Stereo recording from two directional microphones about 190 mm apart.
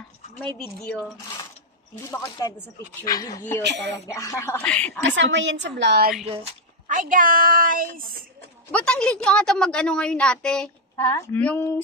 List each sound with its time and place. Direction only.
0.4 s a woman's voice: 5° left (ahead or behind)
3.1 s speech: 20° left (ahead or behind)
3.6 s speech: 65° right (ahead or behind)
3.9 s speech: 15° left (ahead or behind)
5.0 s a woman's voice: 75° right (ahead or behind)
6.9 s a woman's voice: 45° right (ahead or behind)
8.7 s a woman's voice: 5° left (ahead or behind)